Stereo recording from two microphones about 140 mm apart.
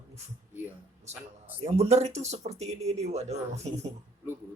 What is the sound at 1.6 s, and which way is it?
Speech, 50° right (ahead or behind).